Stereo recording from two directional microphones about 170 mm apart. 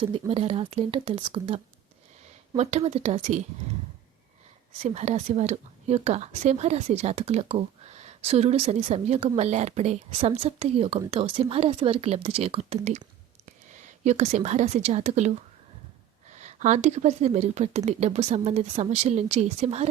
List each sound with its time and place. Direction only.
0.0 s speech: 35° right (ahead or behind)
4.8 s speech: 40° right (ahead or behind)
14.0 s speech: 40° right (ahead or behind)
16.3 s speech: 45° right (ahead or behind)